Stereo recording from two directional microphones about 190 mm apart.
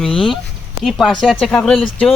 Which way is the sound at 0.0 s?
Centre (ahead or behind).